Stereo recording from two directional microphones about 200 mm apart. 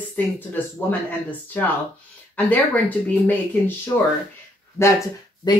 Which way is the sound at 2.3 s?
10° left (ahead or behind).